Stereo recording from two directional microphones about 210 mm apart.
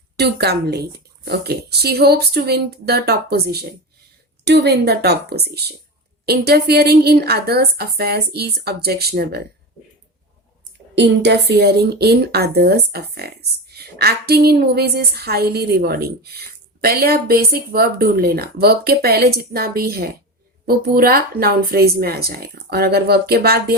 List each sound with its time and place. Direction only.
0.2 s speech: 50° right (ahead or behind)
10.9 s speech: 55° right (ahead or behind)